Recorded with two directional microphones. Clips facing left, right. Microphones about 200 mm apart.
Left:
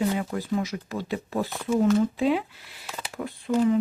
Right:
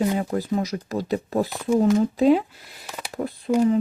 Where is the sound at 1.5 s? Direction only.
15° right (ahead or behind).